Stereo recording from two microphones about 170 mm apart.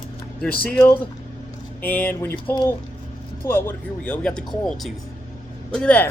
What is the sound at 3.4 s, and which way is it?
Speech, 15° left (ahead or behind).